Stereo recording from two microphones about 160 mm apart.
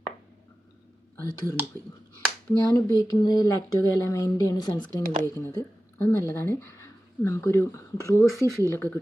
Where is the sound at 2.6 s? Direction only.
25° left (ahead or behind).